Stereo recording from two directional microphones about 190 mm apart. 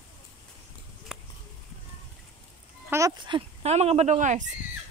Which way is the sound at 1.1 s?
5° right (ahead or behind).